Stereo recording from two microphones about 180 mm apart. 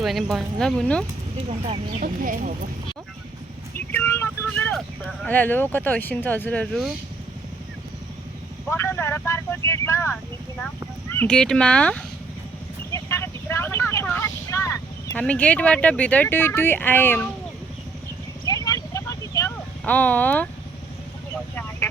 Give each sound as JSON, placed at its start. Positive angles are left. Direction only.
{"t": 0.0, "sound": "speech", "side_deg": 0}
{"t": 1.5, "sound": "speech", "side_deg": -35}
{"t": 2.0, "sound": "speech", "side_deg": -50}
{"t": 3.8, "sound": "a sound", "side_deg": 10}
{"t": 5.2, "sound": "speech", "side_deg": 10}
{"t": 8.6, "sound": "speech", "side_deg": 15}
{"t": 12.9, "sound": "vehicle", "side_deg": 15}
{"t": 15.2, "sound": "speech", "side_deg": 5}
{"t": 18.4, "sound": "vehicle", "side_deg": 20}
{"t": 19.8, "sound": "speech", "side_deg": 10}
{"t": 21.5, "sound": "vehicle", "side_deg": 10}